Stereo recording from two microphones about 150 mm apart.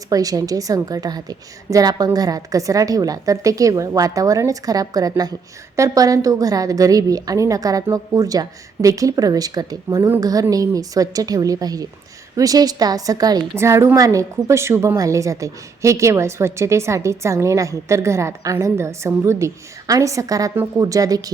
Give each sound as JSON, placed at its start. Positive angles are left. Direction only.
{"t": 0.1, "sound": "a woman's voice", "side_deg": -25}